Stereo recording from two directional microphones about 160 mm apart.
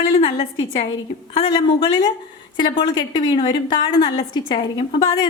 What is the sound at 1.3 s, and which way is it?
A woman's voice, 30° left (ahead or behind).